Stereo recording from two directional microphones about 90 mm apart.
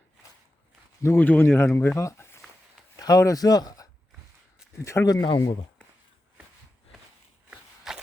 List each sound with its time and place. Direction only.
1.0 s speech: 20° left (ahead or behind)
2.0 s a sound: 30° left (ahead or behind)
2.9 s speech: 40° left (ahead or behind)
4.8 s speech: 35° left (ahead or behind)
5.1 s speech: 55° left (ahead or behind)
7.9 s a sound: centre (ahead or behind)